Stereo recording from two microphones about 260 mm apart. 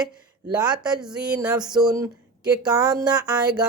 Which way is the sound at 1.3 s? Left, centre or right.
Centre.